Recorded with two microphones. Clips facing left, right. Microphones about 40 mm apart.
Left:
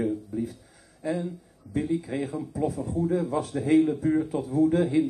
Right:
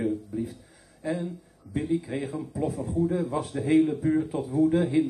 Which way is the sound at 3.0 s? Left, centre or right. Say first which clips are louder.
Left 1 dB; centre.